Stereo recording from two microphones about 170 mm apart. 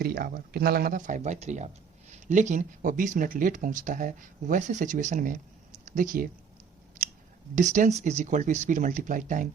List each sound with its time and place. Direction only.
0.0 s speech: 65° right (ahead or behind)
7.5 s speech: 50° right (ahead or behind)